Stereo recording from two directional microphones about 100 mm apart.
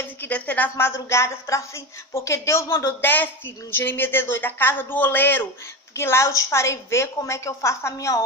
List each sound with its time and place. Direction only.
0.0 s a woman's voice: 15° left (ahead or behind)